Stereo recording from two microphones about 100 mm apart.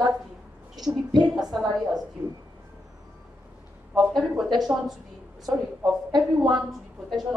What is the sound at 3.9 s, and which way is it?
A man's voice, centre (ahead or behind).